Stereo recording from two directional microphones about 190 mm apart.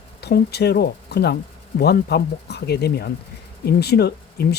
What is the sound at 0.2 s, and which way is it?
Speech, 60° left (ahead or behind).